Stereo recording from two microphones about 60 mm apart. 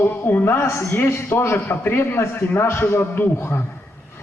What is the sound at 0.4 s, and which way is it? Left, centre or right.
A man's voice, left.